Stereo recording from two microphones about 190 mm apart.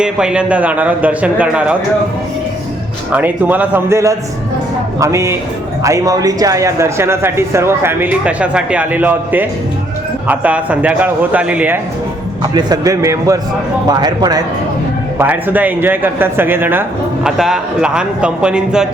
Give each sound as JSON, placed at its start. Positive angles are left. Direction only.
{"t": 0.0, "sound": "a man's voice", "side_deg": -5}
{"t": 3.1, "sound": "a man's voice", "side_deg": -10}
{"t": 12.4, "sound": "a man's voice", "side_deg": -20}
{"t": 15.2, "sound": "a man's voice", "side_deg": -10}